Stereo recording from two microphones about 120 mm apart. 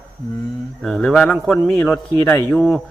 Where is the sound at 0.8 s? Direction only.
5° left (ahead or behind).